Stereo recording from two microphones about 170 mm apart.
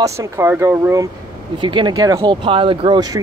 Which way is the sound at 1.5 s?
30° right (ahead or behind).